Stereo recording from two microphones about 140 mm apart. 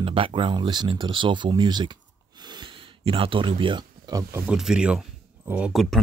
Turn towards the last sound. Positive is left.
turn(degrees=0)  # may be behind; listen again after turning